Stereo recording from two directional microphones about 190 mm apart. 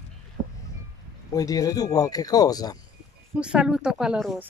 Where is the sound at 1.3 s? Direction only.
20° left (ahead or behind).